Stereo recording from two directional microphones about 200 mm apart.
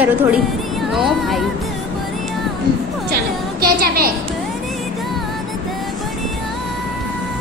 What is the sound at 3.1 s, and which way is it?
A woman's voice, 50° right (ahead or behind).